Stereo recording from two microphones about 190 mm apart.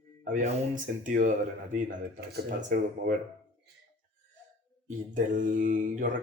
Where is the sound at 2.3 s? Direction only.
50° right (ahead or behind).